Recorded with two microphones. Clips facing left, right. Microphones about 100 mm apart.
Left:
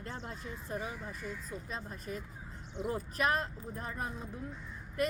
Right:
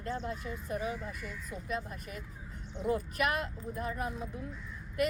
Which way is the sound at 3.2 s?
35° left (ahead or behind).